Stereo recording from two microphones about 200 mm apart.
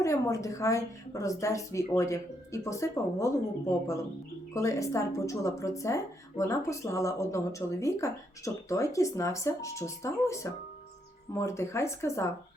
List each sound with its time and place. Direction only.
0.0 s speech: 15° left (ahead or behind)